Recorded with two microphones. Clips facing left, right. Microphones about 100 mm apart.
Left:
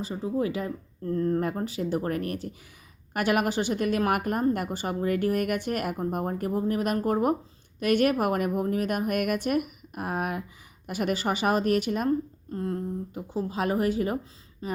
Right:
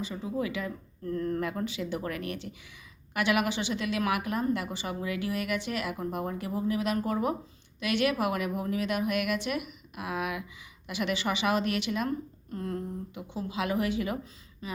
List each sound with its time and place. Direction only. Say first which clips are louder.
0.0 s a woman's voice: left 4 dB; 35° left (ahead or behind)
12.5 s speech: left 3 dB; 30° left (ahead or behind)